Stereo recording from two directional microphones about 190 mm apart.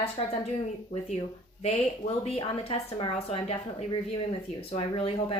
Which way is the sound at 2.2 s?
30° left (ahead or behind).